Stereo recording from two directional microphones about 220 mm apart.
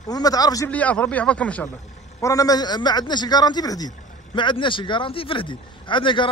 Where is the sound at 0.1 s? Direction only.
15° left (ahead or behind).